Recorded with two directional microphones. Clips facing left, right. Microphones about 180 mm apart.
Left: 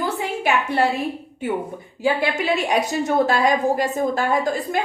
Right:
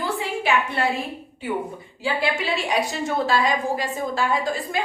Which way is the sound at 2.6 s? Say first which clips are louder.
Left 3 dB; 45° left (ahead or behind).